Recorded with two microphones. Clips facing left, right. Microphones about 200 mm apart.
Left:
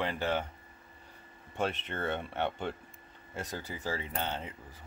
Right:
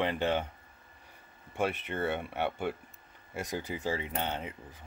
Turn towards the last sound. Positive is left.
turn(degrees=-15)  # may be behind; listen again after turning